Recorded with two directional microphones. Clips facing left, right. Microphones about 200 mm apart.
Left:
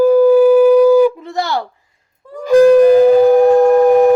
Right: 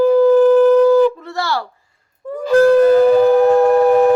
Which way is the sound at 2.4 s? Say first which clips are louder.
Left 3 dB; 15° left (ahead or behind).